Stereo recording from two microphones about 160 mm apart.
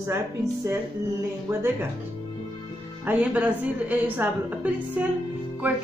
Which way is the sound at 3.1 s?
10° right (ahead or behind).